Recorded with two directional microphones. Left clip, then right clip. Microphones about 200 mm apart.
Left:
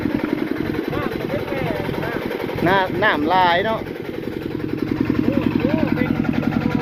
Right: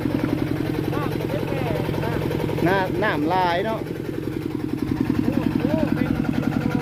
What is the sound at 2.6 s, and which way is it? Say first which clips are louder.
Speech: left 5 dB; 15° right (ahead or behind).